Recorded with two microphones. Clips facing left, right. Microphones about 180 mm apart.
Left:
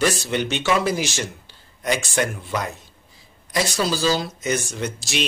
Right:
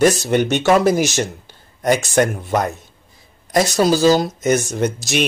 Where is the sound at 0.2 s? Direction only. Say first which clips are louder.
Right 7 dB; 50° right (ahead or behind).